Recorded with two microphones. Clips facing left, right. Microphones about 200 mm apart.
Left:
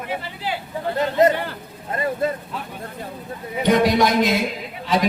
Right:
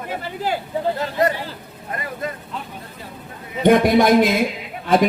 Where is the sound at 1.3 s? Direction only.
60° left (ahead or behind).